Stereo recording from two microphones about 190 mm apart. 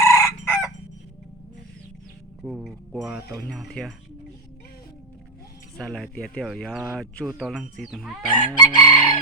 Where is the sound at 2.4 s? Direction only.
Centre (ahead or behind).